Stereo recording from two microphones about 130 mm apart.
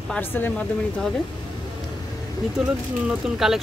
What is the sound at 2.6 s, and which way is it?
Speech, 5° right (ahead or behind).